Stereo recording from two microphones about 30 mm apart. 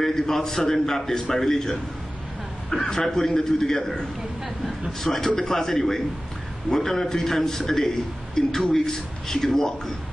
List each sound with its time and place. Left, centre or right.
0.0 s a sound: centre
0.4 s speech: centre
2.7 s a man's voice: left
3.1 s a man's voice: centre
5.1 s speech: centre